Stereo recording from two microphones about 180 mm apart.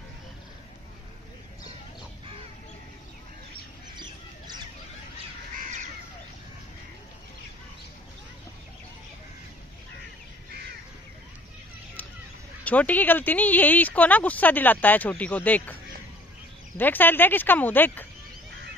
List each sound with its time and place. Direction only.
3.9 s squawk: 25° right (ahead or behind)
12.6 s speech: 10° left (ahead or behind)